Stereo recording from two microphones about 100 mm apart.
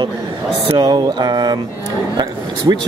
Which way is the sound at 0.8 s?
45° right (ahead or behind).